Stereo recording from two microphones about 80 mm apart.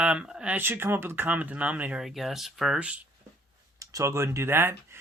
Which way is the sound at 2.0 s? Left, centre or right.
Centre.